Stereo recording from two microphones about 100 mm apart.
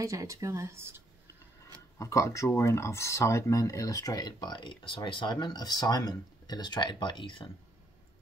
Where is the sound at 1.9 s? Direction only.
30° left (ahead or behind); by 7.4 s 55° left (ahead or behind).